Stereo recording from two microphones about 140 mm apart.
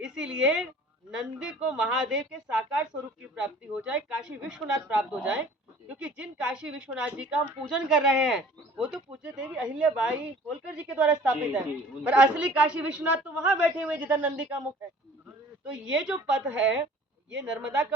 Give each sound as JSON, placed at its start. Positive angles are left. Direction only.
{"t": 0.0, "sound": "a woman's voice", "side_deg": -5}
{"t": 3.3, "sound": "speech", "side_deg": -10}
{"t": 15.7, "sound": "speech", "side_deg": -10}